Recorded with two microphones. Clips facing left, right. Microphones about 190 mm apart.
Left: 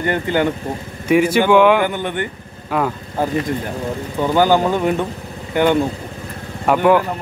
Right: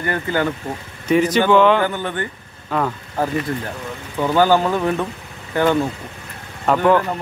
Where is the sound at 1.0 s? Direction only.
10° left (ahead or behind).